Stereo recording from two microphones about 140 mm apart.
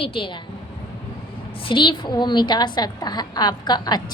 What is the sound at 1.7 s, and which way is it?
A woman's voice, 35° left (ahead or behind).